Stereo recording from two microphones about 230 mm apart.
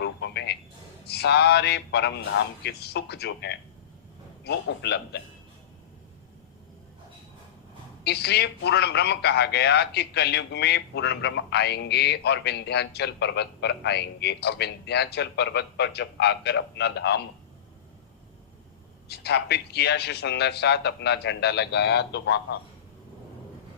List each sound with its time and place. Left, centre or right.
0.0 s telephone: left
1.0 s a man's voice: left
8.0 s a man's voice: left
19.0 s a man's voice: left